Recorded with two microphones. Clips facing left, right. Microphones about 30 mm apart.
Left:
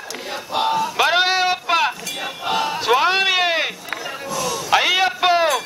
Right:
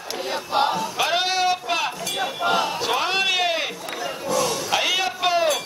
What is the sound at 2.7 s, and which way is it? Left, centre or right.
Sheep, left.